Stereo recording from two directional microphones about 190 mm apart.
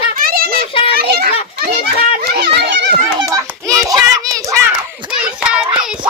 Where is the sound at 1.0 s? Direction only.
55° right (ahead or behind).